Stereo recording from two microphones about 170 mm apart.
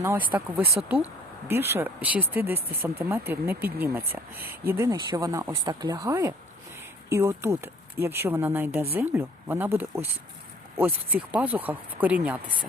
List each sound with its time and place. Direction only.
0.0 s speech: 10° right (ahead or behind)
11.3 s speech: 10° right (ahead or behind)